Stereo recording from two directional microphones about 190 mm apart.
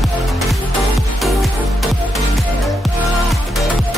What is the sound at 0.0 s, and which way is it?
Music, centre (ahead or behind).